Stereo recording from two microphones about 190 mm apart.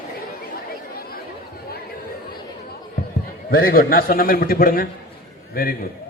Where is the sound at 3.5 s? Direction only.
50° left (ahead or behind).